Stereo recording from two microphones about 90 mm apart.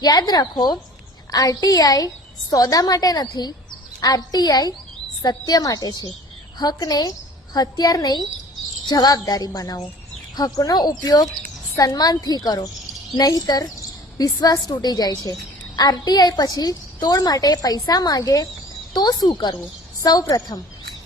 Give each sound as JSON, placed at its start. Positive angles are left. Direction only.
{"t": 0.0, "sound": "a woman's voice", "side_deg": 50}
{"t": 1.3, "sound": "a woman's voice", "side_deg": 45}
{"t": 20.0, "sound": "a woman's voice", "side_deg": 40}